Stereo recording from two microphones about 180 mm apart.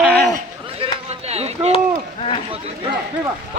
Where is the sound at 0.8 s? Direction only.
35° right (ahead or behind).